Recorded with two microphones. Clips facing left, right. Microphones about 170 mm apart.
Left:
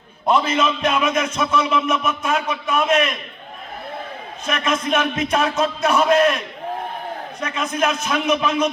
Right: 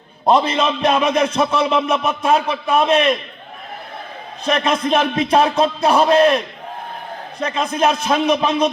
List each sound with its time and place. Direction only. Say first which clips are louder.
0.3 s a man's voice: right 3 dB; 30° right (ahead or behind)
4.4 s a man's voice: right 4 dB; 30° right (ahead or behind)